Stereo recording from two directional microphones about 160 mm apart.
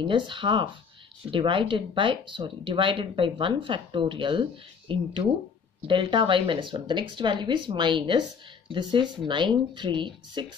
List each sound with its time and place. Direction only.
0.0 s speech: 30° right (ahead or behind)